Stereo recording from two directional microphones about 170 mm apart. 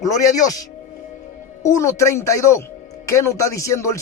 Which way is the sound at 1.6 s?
15° left (ahead or behind).